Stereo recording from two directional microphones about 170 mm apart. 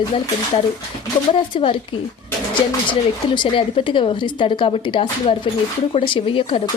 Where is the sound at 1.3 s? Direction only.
30° left (ahead or behind).